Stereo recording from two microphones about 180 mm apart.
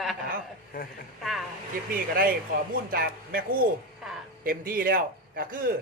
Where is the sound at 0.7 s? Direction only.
50° left (ahead or behind).